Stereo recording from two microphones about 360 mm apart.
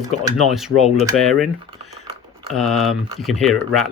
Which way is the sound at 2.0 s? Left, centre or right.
Centre.